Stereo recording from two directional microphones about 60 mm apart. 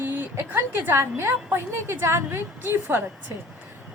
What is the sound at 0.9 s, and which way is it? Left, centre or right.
A woman's voice, right.